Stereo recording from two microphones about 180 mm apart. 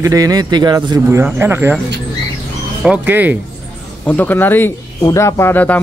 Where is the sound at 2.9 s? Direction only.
10° right (ahead or behind).